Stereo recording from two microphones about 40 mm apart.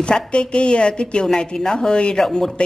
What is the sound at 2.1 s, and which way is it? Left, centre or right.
Speech, centre.